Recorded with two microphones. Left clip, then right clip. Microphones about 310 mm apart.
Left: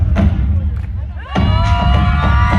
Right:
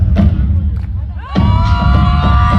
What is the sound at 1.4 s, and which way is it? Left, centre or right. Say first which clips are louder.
Music: right 1 dB; centre.